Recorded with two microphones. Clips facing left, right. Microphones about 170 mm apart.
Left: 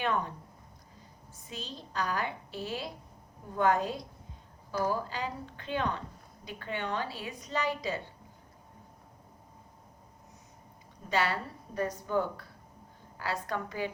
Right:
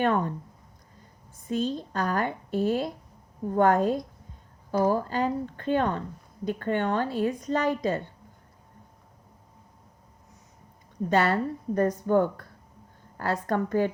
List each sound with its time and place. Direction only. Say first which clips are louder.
0.0 s a woman's voice: right 7 dB; 50° right (ahead or behind)
1.5 s a woman's voice: right 15 dB; 50° right (ahead or behind)
11.1 s a woman's voice: right 7 dB; 50° right (ahead or behind)